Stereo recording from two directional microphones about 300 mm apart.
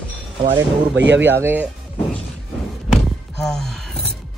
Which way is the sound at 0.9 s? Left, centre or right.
Right.